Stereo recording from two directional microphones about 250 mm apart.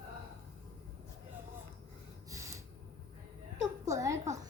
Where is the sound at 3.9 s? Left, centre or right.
Centre.